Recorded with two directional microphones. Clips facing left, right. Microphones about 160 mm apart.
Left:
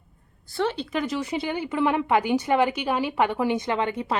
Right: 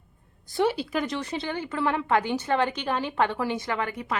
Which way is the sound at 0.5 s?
10° right (ahead or behind).